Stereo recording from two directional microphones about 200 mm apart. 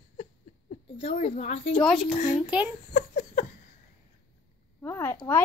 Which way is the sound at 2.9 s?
35° left (ahead or behind).